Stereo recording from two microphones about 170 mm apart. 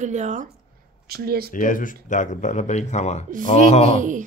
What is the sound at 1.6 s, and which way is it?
Speech, 50° left (ahead or behind).